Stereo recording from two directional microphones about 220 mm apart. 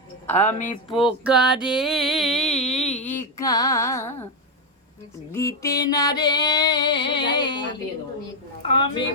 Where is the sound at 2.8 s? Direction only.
30° left (ahead or behind).